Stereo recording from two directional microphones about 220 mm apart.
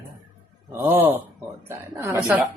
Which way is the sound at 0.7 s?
10° right (ahead or behind).